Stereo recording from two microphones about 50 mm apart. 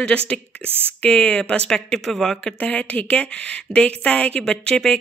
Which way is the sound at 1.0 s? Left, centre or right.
Left.